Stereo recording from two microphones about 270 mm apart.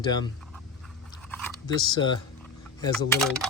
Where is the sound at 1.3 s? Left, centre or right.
Centre.